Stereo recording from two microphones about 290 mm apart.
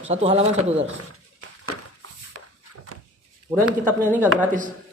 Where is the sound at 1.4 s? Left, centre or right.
Right.